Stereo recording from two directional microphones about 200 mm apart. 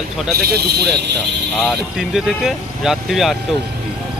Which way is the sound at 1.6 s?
Centre (ahead or behind).